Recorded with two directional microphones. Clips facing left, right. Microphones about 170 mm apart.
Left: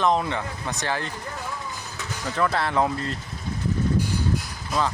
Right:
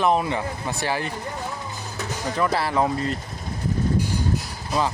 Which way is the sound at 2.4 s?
5° right (ahead or behind).